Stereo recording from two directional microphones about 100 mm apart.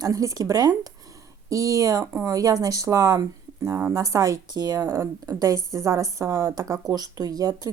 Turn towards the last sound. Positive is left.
turn(degrees=-40)  # may be behind; listen again after turning